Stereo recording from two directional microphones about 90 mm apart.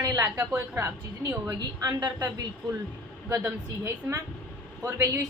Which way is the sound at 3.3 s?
35° right (ahead or behind).